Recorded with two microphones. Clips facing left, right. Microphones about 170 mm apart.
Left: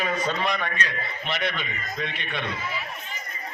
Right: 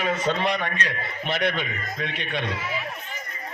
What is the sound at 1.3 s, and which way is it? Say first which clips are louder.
Speech: right 4 dB; 50° right (ahead or behind).